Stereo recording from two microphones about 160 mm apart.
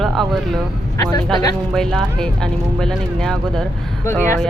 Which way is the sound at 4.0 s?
15° left (ahead or behind).